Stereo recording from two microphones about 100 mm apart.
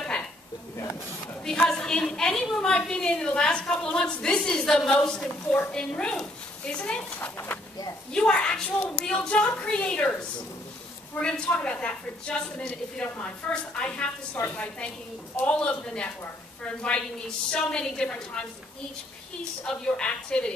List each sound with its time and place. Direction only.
0.0 s a sound: 10° left (ahead or behind)
1.4 s a woman's voice: 5° left (ahead or behind)
8.1 s a woman's voice: 10° left (ahead or behind)
11.1 s a woman's voice: 10° left (ahead or behind)
17.5 s a woman's voice: 10° left (ahead or behind)
19.6 s a woman's voice: 10° left (ahead or behind)